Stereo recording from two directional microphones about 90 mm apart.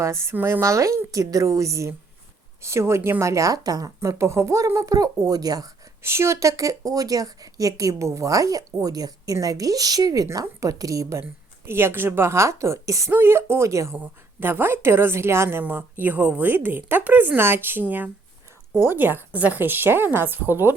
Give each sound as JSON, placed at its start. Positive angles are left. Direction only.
{"t": 0.0, "sound": "a woman's voice", "side_deg": -30}
{"t": 6.0, "sound": "a woman's voice", "side_deg": -30}
{"t": 10.2, "sound": "a woman's voice", "side_deg": -35}
{"t": 11.6, "sound": "a woman's voice", "side_deg": -25}
{"t": 13.1, "sound": "a woman's voice", "side_deg": -25}
{"t": 13.9, "sound": "a woman's voice", "side_deg": -20}